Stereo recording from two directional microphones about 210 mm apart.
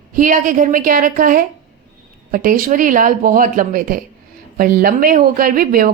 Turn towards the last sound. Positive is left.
turn(degrees=-45)  # may be behind; listen again after turning